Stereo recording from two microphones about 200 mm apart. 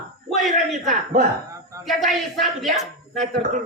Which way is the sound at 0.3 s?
Centre (ahead or behind).